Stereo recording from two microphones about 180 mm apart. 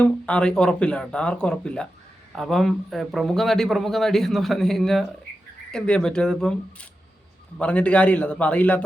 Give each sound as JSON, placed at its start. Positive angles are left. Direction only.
{"t": 0.0, "sound": "a man's voice", "side_deg": 5}